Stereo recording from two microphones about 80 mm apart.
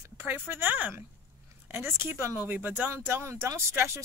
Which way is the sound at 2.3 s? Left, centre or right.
Right.